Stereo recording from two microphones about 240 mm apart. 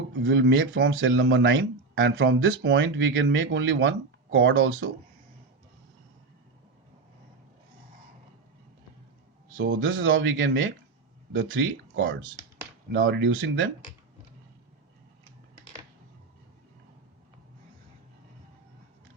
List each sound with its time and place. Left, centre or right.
0.3 s speech: right
9.6 s speech: right
12.9 s speech: right